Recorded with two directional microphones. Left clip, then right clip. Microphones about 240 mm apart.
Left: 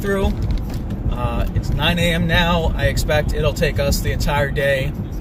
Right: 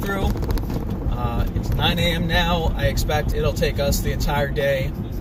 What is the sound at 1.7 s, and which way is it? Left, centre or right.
Speech, centre.